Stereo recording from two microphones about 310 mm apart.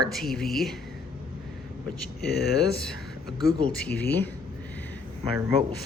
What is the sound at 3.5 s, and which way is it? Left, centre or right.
Speech, left.